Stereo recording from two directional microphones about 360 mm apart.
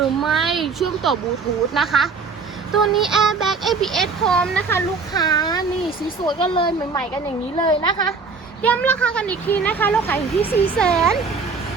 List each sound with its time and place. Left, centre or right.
0.0 s speech: centre